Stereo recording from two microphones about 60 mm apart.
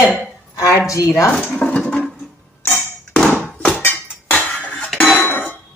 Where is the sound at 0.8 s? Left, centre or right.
Left.